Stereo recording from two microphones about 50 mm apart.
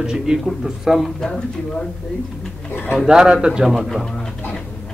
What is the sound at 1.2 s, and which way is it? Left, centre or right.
Speech, centre.